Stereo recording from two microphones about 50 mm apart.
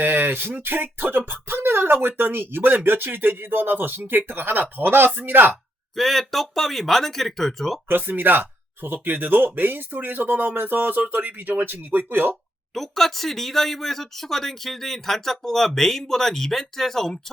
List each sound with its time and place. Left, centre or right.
0.0 s speech: right
6.0 s speech: centre
7.9 s speech: right
12.7 s speech: centre